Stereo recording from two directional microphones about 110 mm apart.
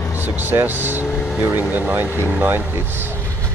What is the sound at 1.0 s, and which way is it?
Vehicle, 10° left (ahead or behind).